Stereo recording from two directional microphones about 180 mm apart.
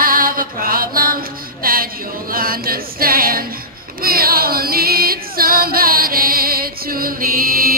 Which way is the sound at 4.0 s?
55° right (ahead or behind).